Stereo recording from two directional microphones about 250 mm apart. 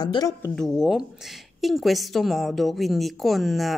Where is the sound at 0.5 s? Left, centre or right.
Centre.